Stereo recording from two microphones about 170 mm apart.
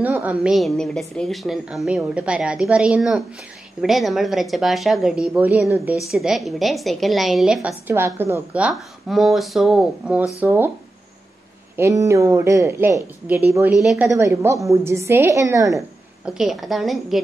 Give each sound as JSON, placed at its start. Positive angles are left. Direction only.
{"t": 0.0, "sound": "a woman's voice", "side_deg": -10}
{"t": 11.7, "sound": "a woman's voice", "side_deg": -15}
{"t": 13.7, "sound": "a woman's voice", "side_deg": 0}
{"t": 14.0, "sound": "a woman's voice", "side_deg": -15}
{"t": 16.3, "sound": "a woman's voice", "side_deg": 0}